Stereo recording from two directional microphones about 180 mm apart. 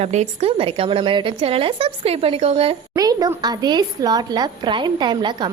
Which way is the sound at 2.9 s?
20° right (ahead or behind).